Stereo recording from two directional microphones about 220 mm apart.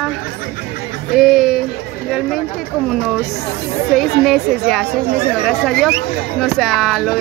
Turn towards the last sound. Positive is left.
turn(degrees=0)  # may be behind; listen again after turning